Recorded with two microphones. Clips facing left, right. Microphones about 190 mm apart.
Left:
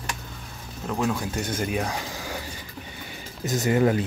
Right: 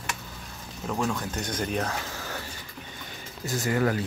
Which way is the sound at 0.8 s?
Centre (ahead or behind).